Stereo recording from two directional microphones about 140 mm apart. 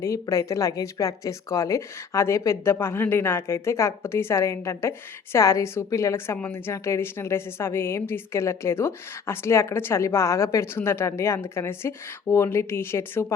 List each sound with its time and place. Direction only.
0.0 s speech: 20° left (ahead or behind)